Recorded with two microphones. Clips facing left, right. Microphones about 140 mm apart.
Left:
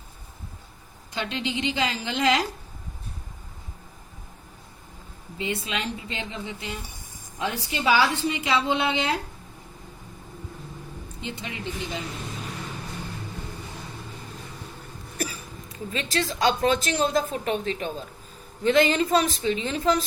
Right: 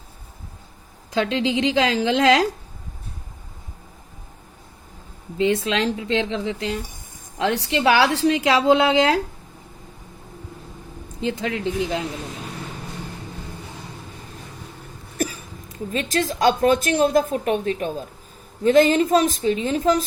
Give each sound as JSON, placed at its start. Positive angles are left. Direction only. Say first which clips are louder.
{"t": 1.2, "sound": "a woman's voice", "louder": "right 8 dB", "side_deg": -90}
{"t": 5.4, "sound": "a woman's voice", "louder": "right 10 dB", "side_deg": -90}
{"t": 11.2, "sound": "a woman's voice", "louder": "right 11 dB", "side_deg": -90}
{"t": 15.9, "sound": "a woman's voice", "louder": "right 5 dB", "side_deg": -45}